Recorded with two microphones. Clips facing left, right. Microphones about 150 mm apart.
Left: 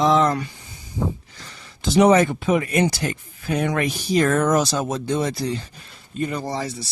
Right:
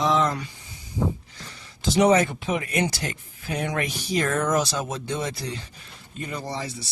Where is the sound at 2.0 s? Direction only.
55° left (ahead or behind).